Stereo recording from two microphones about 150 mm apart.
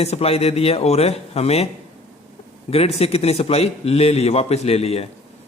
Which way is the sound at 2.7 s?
40° left (ahead or behind).